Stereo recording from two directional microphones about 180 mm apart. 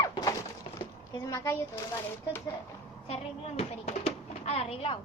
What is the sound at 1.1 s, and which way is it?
Speech, 15° left (ahead or behind).